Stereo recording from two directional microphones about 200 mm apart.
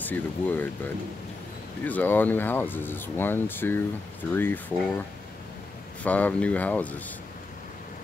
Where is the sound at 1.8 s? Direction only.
10° left (ahead or behind).